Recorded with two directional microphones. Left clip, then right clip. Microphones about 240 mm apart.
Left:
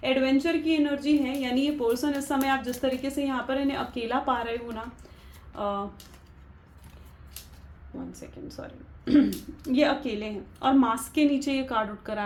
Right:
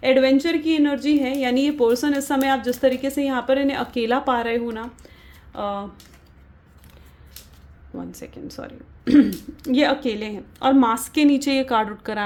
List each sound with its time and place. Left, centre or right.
0.0 s a woman's voice: right
8.2 s a woman's voice: right